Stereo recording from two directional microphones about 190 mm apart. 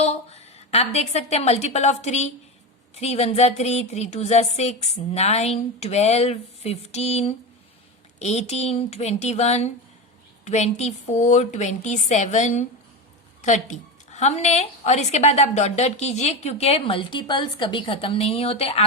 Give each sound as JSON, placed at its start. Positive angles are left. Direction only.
{"t": 0.0, "sound": "a woman's voice", "side_deg": 35}